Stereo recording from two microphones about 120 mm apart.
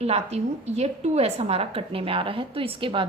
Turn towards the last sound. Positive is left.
turn(degrees=-45)  # may be behind; listen again after turning